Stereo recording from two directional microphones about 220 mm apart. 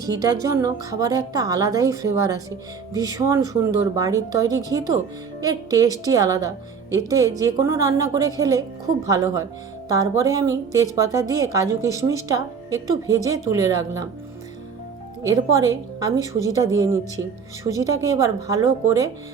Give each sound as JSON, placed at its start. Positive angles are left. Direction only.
{"t": 0.0, "sound": "a woman's voice", "side_deg": -15}
{"t": 15.2, "sound": "a woman's voice", "side_deg": -15}